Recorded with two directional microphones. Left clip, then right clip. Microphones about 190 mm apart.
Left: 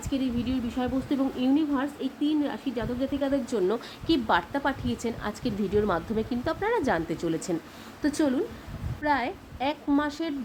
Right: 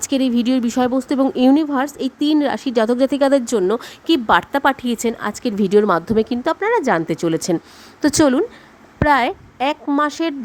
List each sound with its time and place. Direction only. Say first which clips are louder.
0.0 s a woman's voice: right 11 dB; 55° right (ahead or behind); by 10.3 s 40° right (ahead or behind)